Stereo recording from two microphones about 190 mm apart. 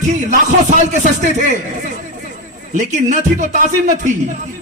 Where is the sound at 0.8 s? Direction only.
40° right (ahead or behind).